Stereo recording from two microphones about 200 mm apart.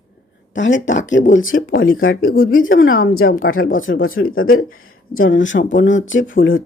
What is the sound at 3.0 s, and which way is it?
Speech, 45° left (ahead or behind).